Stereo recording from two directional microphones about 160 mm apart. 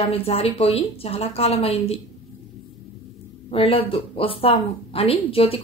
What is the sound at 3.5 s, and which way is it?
Speech, 35° left (ahead or behind).